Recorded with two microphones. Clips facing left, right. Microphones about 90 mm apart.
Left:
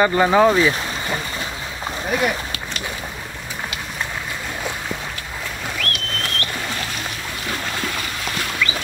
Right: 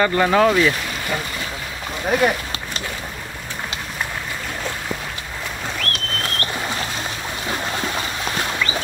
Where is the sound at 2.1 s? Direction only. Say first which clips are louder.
Right 3 dB; 35° right (ahead or behind).